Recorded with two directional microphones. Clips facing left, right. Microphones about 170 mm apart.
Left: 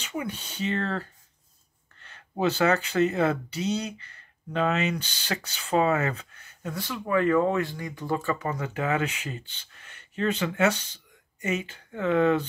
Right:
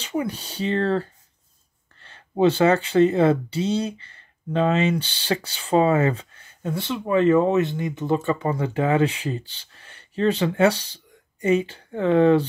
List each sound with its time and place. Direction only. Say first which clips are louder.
0.0 s speech: right 6 dB; 35° right (ahead or behind)
2.0 s speech: right 7 dB; 30° right (ahead or behind)